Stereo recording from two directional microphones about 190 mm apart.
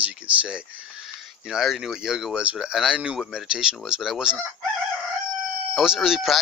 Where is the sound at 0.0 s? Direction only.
5° right (ahead or behind).